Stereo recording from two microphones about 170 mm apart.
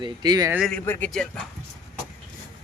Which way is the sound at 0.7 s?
10° left (ahead or behind).